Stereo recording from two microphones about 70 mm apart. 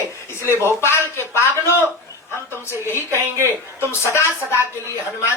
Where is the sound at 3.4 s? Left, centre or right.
Left.